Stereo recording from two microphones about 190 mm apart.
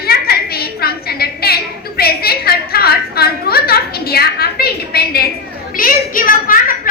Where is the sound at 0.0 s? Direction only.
55° left (ahead or behind).